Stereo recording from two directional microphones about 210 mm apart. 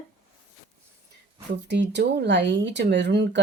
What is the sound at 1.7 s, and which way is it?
Speech, 55° right (ahead or behind).